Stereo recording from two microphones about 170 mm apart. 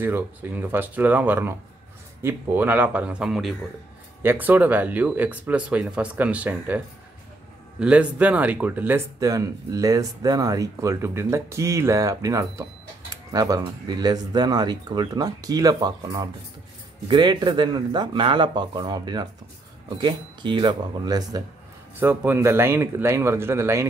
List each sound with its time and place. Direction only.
0.0 s speech: 10° right (ahead or behind)
4.2 s speech: 10° right (ahead or behind)
7.8 s speech: 5° right (ahead or behind)